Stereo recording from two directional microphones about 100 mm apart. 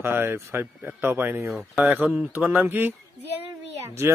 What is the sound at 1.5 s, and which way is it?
Speech, 10° right (ahead or behind).